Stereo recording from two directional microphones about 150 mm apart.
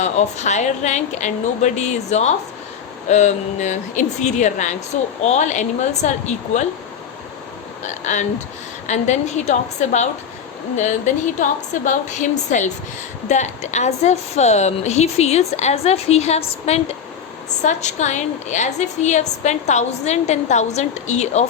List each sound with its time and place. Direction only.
0.0 s a woman's voice: 50° left (ahead or behind)
7.9 s a woman's voice: 55° left (ahead or behind)